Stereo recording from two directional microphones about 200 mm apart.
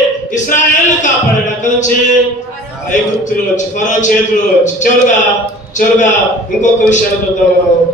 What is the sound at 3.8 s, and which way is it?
A man's voice, 40° left (ahead or behind).